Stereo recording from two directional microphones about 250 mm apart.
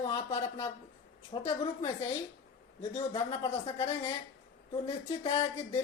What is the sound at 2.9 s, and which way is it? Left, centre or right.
Speech, centre.